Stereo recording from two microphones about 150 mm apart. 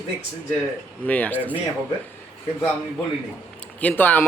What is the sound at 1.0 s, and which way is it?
Speech, 10° left (ahead or behind).